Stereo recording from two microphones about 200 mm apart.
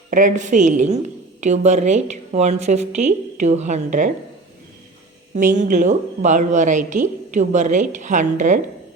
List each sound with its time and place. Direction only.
0.1 s speech: 40° right (ahead or behind)
5.3 s speech: 40° right (ahead or behind)